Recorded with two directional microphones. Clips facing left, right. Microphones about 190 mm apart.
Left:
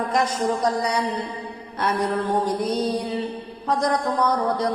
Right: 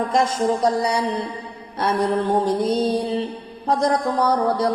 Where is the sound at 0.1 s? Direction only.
25° right (ahead or behind).